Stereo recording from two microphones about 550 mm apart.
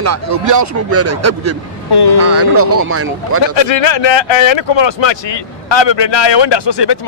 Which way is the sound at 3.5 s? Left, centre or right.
Left.